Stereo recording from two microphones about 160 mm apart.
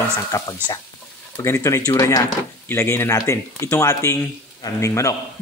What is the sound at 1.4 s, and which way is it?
Speech, 20° left (ahead or behind).